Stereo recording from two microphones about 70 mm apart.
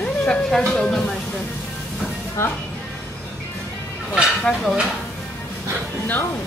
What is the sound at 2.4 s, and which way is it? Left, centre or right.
Speech, left.